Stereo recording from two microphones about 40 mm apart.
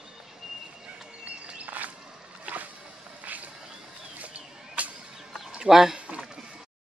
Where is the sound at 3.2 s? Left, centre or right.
Right.